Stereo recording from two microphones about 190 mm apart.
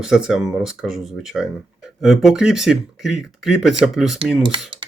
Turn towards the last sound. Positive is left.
turn(degrees=-25)  # may be behind; listen again after turning